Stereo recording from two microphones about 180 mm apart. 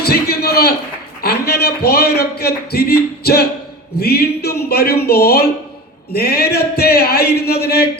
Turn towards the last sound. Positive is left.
turn(degrees=60)  # may be behind; listen again after turning